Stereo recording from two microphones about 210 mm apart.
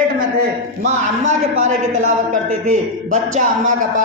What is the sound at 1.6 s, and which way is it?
A man's voice, 35° right (ahead or behind).